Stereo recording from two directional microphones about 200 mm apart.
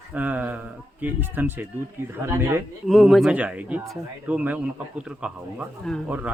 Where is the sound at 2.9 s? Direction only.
Centre (ahead or behind).